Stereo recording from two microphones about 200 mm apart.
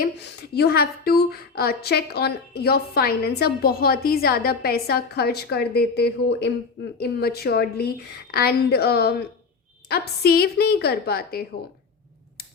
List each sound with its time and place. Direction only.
0.0 s a woman's voice: 55° left (ahead or behind)